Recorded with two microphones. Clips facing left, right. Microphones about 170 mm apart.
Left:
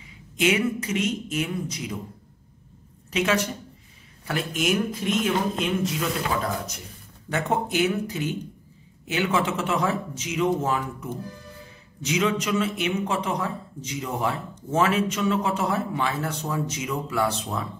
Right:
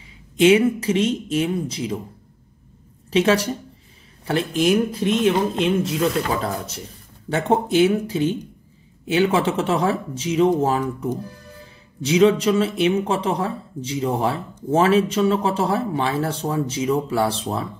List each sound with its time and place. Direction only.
0.4 s speech: 30° right (ahead or behind)
3.1 s a woman's voice: 30° right (ahead or behind)